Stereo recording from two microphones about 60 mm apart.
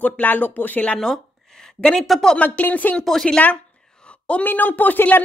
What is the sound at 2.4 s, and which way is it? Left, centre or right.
Speech, left.